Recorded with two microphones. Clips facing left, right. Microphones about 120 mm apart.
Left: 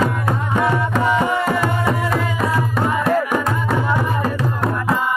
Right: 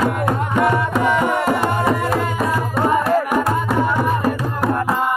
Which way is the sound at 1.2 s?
55° right (ahead or behind).